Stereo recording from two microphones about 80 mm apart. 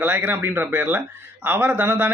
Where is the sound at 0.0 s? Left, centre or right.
Right.